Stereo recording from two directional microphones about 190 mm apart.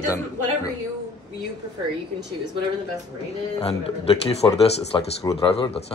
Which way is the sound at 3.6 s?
30° left (ahead or behind).